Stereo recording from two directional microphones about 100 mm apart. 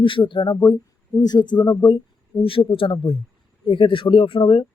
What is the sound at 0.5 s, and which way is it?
Speech, 40° left (ahead or behind).